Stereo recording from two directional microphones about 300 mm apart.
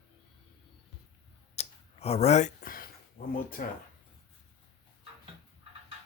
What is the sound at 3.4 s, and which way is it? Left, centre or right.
Speech, left.